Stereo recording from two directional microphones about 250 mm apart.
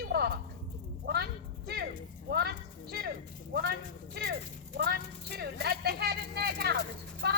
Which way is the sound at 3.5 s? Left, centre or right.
Right.